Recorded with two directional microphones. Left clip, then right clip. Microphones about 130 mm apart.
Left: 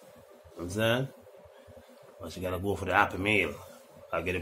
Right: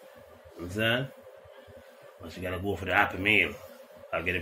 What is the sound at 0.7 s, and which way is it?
Speech, 20° left (ahead or behind).